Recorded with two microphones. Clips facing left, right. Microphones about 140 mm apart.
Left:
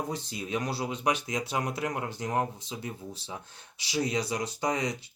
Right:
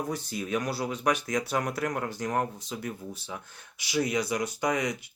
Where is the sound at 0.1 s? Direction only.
25° left (ahead or behind).